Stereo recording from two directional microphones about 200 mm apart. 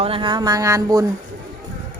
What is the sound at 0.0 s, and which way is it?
Speech, 25° right (ahead or behind).